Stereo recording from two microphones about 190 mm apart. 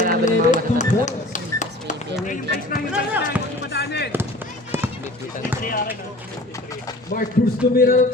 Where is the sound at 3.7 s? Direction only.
60° left (ahead or behind).